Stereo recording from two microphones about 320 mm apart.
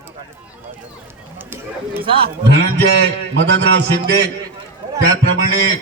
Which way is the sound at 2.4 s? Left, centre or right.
Right.